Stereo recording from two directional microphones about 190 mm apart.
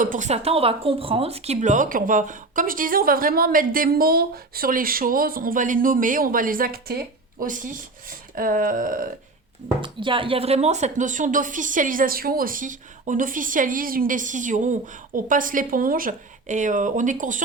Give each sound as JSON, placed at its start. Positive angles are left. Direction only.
{"t": 0.0, "sound": "a woman's voice", "side_deg": -40}
{"t": 9.8, "sound": "a woman's voice", "side_deg": -25}